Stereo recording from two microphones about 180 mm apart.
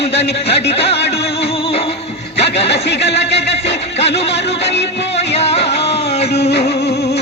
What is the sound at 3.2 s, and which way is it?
Speech, 35° left (ahead or behind).